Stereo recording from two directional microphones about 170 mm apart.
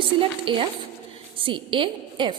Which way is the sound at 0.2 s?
30° right (ahead or behind).